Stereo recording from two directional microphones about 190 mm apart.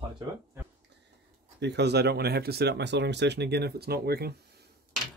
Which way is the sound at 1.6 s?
60° right (ahead or behind).